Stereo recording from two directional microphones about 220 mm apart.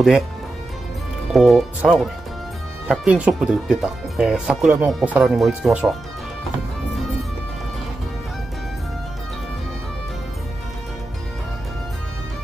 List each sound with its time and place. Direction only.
1.3 s speech: centre (ahead or behind)